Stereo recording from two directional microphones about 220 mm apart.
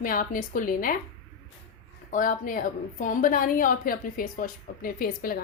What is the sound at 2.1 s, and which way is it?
Speech, 35° left (ahead or behind).